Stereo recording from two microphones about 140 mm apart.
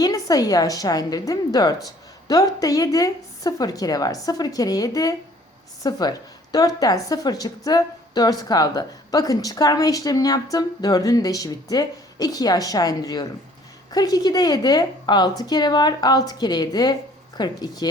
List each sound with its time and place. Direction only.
0.0 s a woman's voice: 25° left (ahead or behind)